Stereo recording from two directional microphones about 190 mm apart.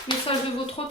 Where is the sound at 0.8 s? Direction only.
30° left (ahead or behind).